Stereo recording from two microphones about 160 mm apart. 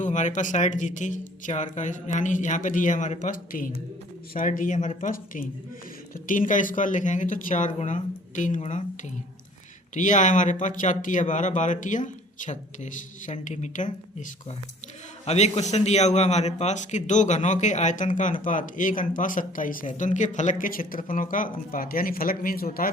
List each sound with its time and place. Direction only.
0.0 s a man's voice: 50° left (ahead or behind)
9.9 s a man's voice: 50° left (ahead or behind)
15.3 s a man's voice: 40° left (ahead or behind); by 22.9 s 65° left (ahead or behind)